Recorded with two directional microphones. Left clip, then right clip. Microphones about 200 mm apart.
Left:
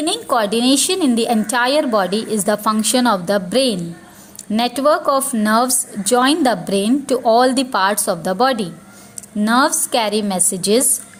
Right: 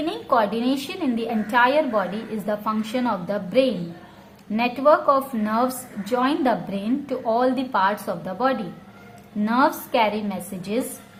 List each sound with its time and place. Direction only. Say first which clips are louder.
0.0 s a woman's voice: left 4 dB; 35° left (ahead or behind)